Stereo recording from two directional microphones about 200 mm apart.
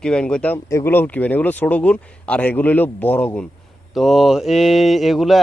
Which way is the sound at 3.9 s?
Centre (ahead or behind).